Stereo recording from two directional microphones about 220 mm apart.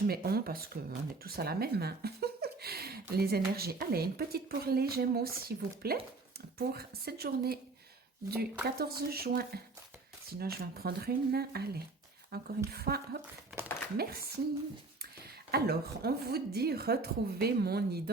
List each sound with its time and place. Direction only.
0.1 s speech: 45° right (ahead or behind)
8.6 s speech: 45° right (ahead or behind)
13.5 s a sound: centre (ahead or behind)
13.9 s speech: 45° right (ahead or behind)